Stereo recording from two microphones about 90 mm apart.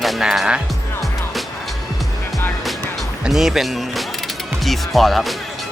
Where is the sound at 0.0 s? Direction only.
5° right (ahead or behind).